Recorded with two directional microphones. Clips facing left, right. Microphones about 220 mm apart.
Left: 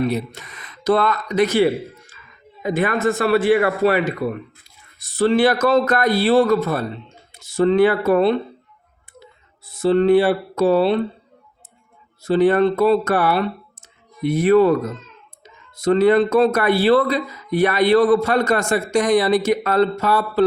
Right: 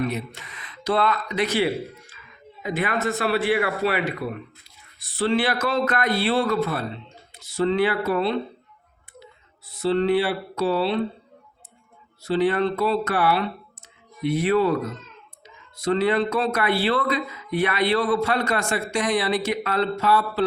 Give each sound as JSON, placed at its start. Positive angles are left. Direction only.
{"t": 0.0, "sound": "speech", "side_deg": 35}
{"t": 2.6, "sound": "speech", "side_deg": 50}
{"t": 9.6, "sound": "speech", "side_deg": 50}
{"t": 12.2, "sound": "speech", "side_deg": 50}